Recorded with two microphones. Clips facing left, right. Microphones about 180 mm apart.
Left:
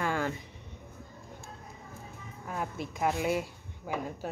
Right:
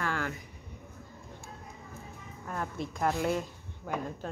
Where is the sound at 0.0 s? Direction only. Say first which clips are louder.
Left 3 dB; 20° left (ahead or behind).